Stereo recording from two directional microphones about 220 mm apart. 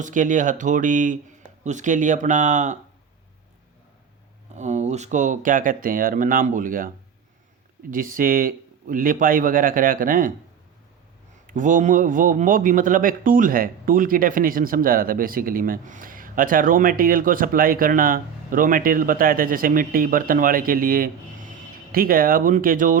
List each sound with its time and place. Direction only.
0.0 s a man's voice: 35° right (ahead or behind)
4.5 s a man's voice: 30° right (ahead or behind)
11.4 s a man's voice: 35° right (ahead or behind)